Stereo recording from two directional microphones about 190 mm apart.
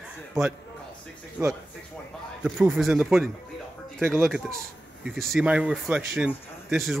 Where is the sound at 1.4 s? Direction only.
5° right (ahead or behind).